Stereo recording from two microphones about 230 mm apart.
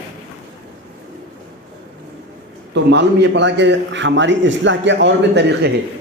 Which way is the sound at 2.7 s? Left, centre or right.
Right.